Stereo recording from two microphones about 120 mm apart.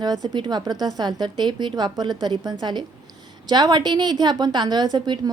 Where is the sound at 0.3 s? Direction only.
35° right (ahead or behind).